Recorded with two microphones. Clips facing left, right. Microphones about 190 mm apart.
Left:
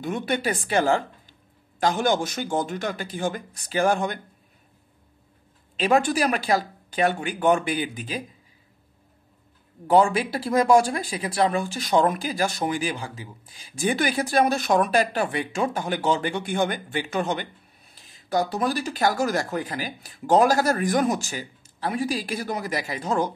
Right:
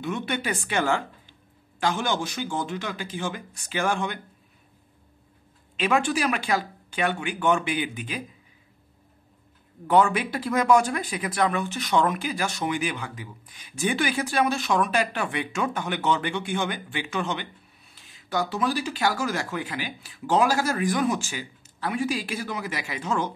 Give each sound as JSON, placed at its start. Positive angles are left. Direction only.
{"t": 0.0, "sound": "speech", "side_deg": 40}
{"t": 5.8, "sound": "speech", "side_deg": 35}
{"t": 9.8, "sound": "speech", "side_deg": 30}